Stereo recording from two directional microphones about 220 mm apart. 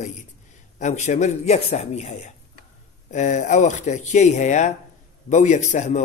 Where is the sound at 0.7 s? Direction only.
35° left (ahead or behind).